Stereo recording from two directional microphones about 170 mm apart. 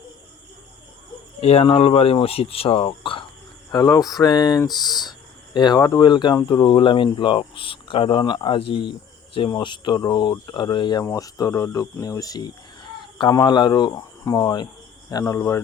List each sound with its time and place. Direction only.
1.4 s speech: 35° left (ahead or behind); by 15.6 s 15° left (ahead or behind)